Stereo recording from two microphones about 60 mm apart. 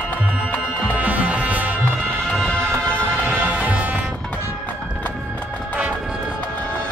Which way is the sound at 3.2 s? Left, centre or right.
Right.